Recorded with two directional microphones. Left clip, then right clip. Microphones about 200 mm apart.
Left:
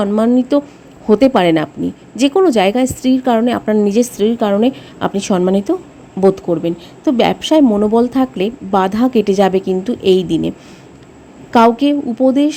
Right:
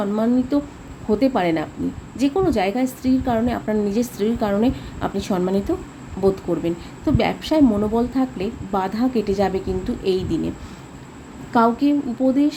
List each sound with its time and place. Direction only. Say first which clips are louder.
0.0 s a woman's voice: left 7 dB; 40° left (ahead or behind)
11.5 s a woman's voice: left 7 dB; 45° left (ahead or behind)